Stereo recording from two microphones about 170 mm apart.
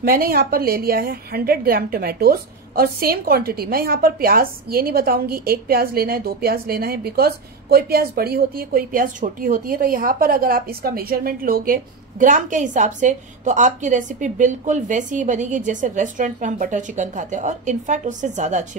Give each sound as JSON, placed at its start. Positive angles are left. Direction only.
{"t": 0.0, "sound": "a woman's voice", "side_deg": -60}